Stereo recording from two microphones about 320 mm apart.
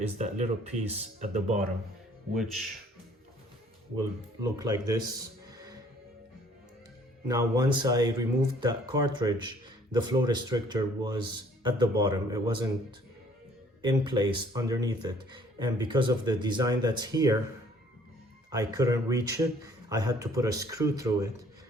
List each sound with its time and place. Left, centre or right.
0.2 s speech: right
2.3 s speech: centre
4.4 s speech: centre
5.5 s music: centre
7.3 s speech: centre
13.8 s speech: centre
18.5 s speech: centre